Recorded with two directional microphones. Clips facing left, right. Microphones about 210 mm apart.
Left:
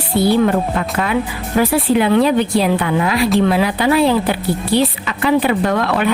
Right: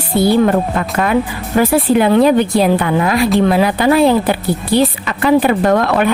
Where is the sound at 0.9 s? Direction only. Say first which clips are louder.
Right 7 dB; 45° right (ahead or behind).